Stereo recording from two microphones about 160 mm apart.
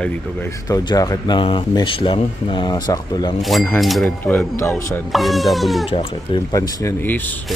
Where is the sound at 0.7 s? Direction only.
20° left (ahead or behind).